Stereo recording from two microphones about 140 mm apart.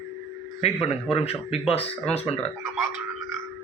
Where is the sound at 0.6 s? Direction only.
45° left (ahead or behind).